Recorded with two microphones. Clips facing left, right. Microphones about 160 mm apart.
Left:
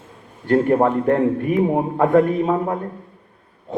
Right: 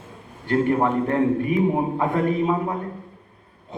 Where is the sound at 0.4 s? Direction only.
45° left (ahead or behind).